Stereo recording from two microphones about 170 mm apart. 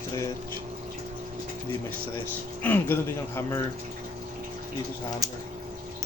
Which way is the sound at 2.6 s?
10° left (ahead or behind).